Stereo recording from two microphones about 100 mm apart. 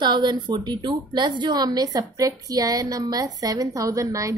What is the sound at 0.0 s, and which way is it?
A woman's voice, 50° right (ahead or behind).